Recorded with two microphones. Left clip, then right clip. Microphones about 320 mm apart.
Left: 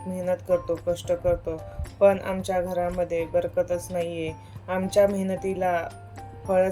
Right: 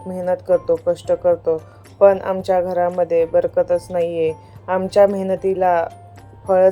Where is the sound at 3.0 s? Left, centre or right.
Right.